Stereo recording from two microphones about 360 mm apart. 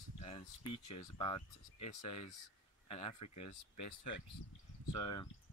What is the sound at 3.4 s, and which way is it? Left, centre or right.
Speech, left.